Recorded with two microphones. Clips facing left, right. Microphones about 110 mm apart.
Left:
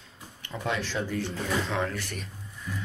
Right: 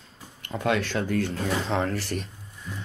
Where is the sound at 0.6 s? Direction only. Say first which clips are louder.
Right 5 dB; 65° right (ahead or behind).